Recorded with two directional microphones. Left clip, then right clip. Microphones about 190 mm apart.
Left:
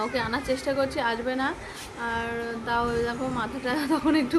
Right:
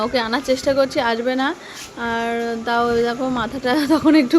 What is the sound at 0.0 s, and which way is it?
A woman's voice, 35° right (ahead or behind).